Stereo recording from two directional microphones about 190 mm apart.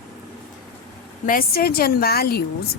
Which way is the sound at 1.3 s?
50° left (ahead or behind).